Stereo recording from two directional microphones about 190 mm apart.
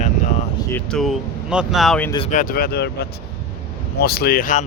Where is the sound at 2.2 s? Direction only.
45° left (ahead or behind).